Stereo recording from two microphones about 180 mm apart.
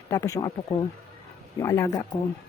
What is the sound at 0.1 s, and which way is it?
Speech, 15° left (ahead or behind).